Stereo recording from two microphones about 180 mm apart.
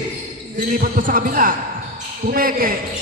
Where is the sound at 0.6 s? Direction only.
50° right (ahead or behind).